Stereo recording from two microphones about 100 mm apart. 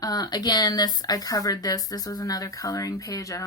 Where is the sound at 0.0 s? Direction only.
40° left (ahead or behind).